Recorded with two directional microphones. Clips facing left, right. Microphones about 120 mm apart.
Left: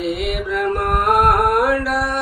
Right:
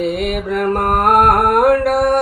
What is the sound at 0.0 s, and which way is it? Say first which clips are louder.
Music: right 3 dB; 50° right (ahead or behind).